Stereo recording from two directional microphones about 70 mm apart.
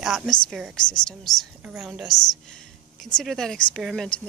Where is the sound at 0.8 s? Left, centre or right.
Centre.